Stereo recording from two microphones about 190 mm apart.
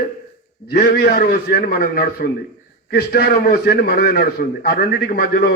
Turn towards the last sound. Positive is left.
turn(degrees=50)  # may be behind; listen again after turning